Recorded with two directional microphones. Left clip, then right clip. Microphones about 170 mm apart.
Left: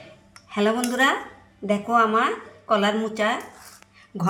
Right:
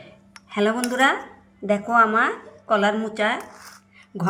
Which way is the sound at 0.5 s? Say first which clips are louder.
Right 1 dB; 15° right (ahead or behind).